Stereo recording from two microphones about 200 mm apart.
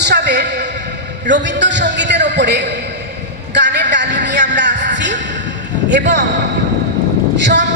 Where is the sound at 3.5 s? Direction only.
60° right (ahead or behind).